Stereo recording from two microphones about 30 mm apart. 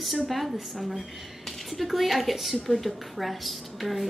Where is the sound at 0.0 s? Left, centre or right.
Centre.